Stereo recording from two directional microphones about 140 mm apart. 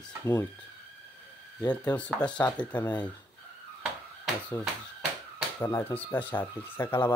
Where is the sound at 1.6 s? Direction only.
10° left (ahead or behind).